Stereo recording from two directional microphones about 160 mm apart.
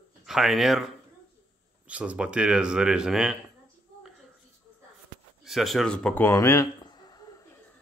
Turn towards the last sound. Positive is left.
turn(degrees=25)  # may be behind; listen again after turning